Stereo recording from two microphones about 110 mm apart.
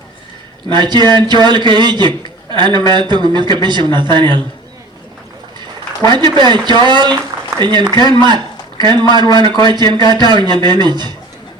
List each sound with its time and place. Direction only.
0.7 s a man's voice: 45° right (ahead or behind)
6.0 s a man's voice: 40° right (ahead or behind)